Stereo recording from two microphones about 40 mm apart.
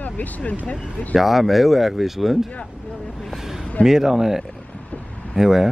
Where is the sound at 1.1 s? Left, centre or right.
Centre.